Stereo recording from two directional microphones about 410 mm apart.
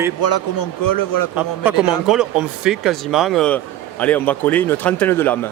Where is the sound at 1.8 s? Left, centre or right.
Centre.